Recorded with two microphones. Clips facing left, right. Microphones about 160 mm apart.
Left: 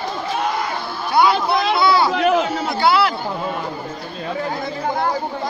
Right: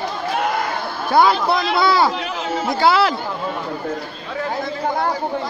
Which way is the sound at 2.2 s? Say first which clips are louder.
Left 10 dB; 60° left (ahead or behind).